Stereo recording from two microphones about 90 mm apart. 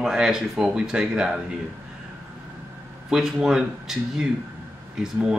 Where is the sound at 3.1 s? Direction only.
5° right (ahead or behind).